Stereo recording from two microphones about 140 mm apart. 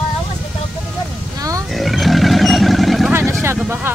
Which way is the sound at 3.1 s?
15° right (ahead or behind).